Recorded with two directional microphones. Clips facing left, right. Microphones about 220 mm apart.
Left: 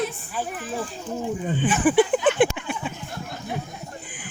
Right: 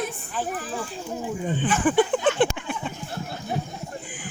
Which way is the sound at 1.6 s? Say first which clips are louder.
Left 2 dB; 10° left (ahead or behind).